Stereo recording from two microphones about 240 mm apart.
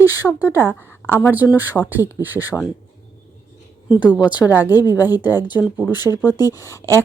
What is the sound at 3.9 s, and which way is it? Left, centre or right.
Speech, centre.